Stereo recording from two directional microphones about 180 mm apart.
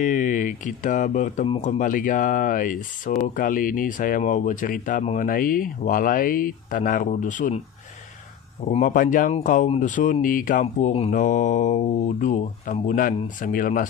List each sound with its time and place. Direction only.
0.0 s speech: 45° left (ahead or behind)
8.6 s speech: 50° left (ahead or behind)